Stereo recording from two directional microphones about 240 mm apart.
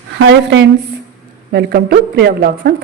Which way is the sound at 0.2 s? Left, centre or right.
Right.